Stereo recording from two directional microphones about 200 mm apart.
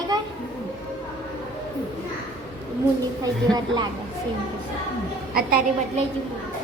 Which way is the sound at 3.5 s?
20° right (ahead or behind).